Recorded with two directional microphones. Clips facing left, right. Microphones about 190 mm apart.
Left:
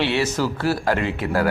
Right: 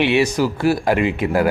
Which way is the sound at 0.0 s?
15° right (ahead or behind).